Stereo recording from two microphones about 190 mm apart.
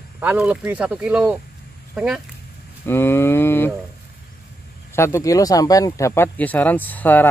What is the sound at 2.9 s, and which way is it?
Speech, 10° left (ahead or behind).